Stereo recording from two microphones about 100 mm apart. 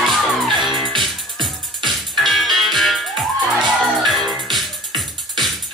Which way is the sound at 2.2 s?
Centre (ahead or behind).